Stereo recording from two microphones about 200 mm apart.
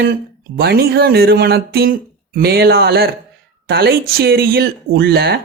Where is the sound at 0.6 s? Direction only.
50° right (ahead or behind).